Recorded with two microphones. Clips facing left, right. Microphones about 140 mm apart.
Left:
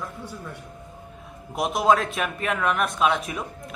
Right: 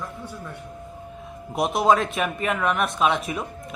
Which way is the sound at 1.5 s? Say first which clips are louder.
Right 1 dB; centre (ahead or behind).